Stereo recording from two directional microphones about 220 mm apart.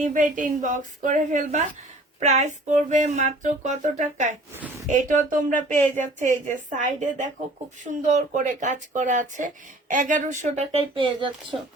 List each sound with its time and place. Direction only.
0.0 s speech: 35° right (ahead or behind)